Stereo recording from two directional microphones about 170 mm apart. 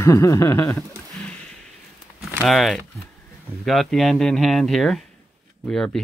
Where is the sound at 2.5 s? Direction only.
Centre (ahead or behind).